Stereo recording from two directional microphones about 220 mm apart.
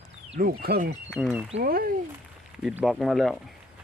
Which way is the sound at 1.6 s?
40° right (ahead or behind).